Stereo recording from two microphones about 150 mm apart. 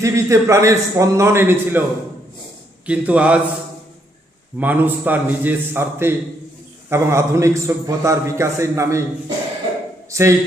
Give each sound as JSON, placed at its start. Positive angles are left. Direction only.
{"t": 0.0, "sound": "a man's voice", "side_deg": -20}
{"t": 2.8, "sound": "a man's voice", "side_deg": -10}
{"t": 4.5, "sound": "a man's voice", "side_deg": -10}
{"t": 10.1, "sound": "speech", "side_deg": -20}